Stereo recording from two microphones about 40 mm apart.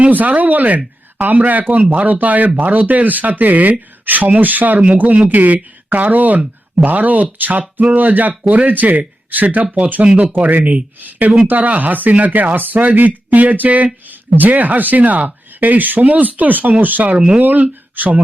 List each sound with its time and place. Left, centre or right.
0.1 s speech: right
14.1 s speech: right
17.2 s speech: right
17.4 s speech: right